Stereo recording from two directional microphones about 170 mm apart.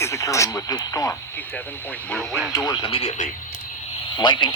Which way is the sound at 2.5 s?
20° left (ahead or behind).